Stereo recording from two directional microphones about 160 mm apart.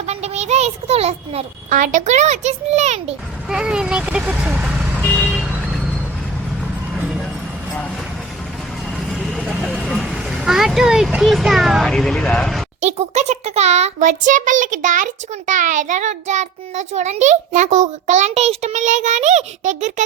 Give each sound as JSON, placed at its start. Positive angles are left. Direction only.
{"t": 0.0, "sound": "a child's voice", "side_deg": -40}
{"t": 1.7, "sound": "a child's voice", "side_deg": -50}
{"t": 3.5, "sound": "speech", "side_deg": -5}
{"t": 9.0, "sound": "vehicle", "side_deg": 0}
{"t": 9.7, "sound": "speech", "side_deg": 0}
{"t": 12.8, "sound": "a child's voice", "side_deg": -45}